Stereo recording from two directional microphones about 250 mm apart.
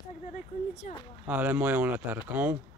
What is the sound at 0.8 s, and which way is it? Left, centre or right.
Speech, left.